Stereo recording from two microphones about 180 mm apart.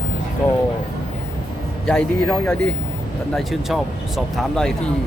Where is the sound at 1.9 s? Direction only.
5° left (ahead or behind).